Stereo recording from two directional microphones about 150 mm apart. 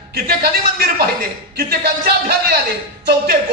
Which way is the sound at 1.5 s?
90° right.